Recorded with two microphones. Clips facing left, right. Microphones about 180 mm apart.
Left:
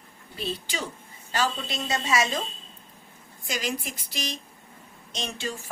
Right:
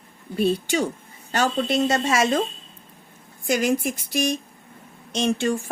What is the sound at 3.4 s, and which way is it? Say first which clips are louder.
Speech: right 10 dB; 55° right (ahead or behind).